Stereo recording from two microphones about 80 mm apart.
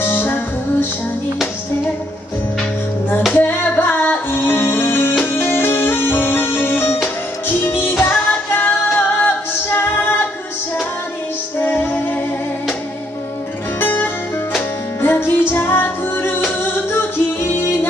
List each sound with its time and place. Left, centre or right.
0.0 s music: left
3.3 s music: left
8.9 s female singing: left
11.6 s music: left
13.7 s music: left